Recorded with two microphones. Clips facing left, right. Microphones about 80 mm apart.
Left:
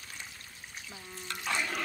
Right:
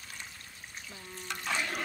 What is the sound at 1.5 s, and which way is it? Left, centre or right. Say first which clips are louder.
Speech: left 1 dB; centre.